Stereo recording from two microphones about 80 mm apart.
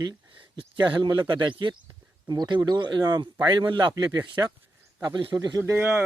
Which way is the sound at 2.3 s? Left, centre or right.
Right.